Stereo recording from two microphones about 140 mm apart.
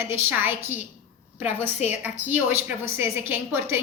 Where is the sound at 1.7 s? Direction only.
55° left (ahead or behind).